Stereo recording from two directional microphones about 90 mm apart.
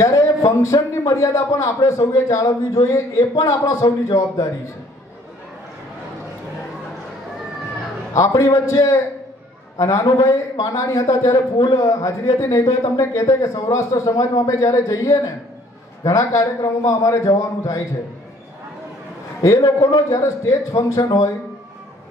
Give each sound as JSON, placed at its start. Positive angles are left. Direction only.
{"t": 0.0, "sound": "a man's voice", "side_deg": 40}
{"t": 8.1, "sound": "a man's voice", "side_deg": 35}
{"t": 19.4, "sound": "a man's voice", "side_deg": 40}